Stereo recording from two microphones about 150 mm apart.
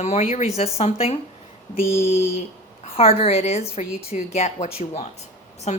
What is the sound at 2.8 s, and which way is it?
A woman's voice, 40° left (ahead or behind).